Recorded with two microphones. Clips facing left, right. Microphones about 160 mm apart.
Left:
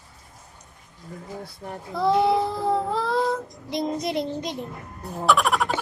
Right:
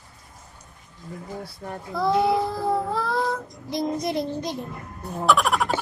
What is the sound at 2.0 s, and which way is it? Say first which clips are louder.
Child singing: left 1 dB; 20° left (ahead or behind).